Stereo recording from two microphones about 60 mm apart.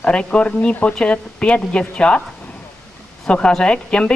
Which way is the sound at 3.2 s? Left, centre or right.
Centre.